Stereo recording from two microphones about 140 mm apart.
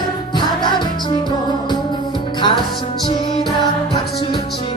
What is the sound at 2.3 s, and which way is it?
Music, 35° left (ahead or behind).